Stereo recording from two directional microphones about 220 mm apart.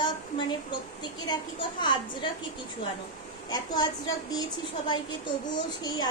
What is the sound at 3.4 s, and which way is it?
A woman's voice, 20° left (ahead or behind).